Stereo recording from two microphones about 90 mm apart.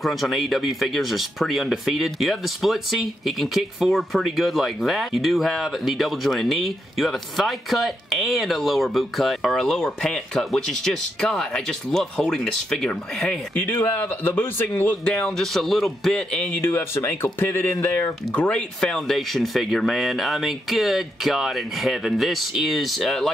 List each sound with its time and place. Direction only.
0.0 s speech: centre (ahead or behind)
13.6 s speech: 20° left (ahead or behind)
15.0 s speech: 5° left (ahead or behind)
16.6 s speech: 25° left (ahead or behind)
18.8 s speech: 5° left (ahead or behind)